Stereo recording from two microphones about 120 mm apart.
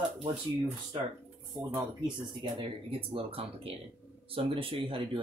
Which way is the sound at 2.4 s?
45° right (ahead or behind).